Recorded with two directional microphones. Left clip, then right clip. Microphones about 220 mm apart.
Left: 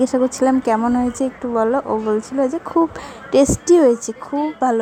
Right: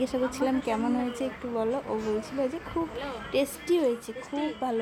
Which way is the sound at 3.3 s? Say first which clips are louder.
Left 14 dB; 35° left (ahead or behind).